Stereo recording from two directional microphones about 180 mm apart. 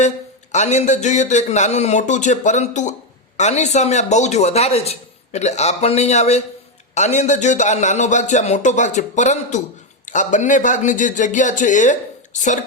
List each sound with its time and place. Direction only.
0.5 s a man's voice: 40° left (ahead or behind)